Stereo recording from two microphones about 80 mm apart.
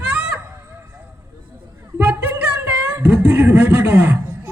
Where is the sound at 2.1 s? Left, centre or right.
Right.